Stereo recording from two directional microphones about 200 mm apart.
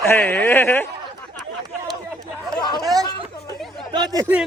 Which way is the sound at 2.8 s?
20° right (ahead or behind).